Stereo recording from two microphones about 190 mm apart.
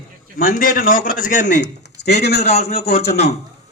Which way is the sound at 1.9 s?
60° left (ahead or behind).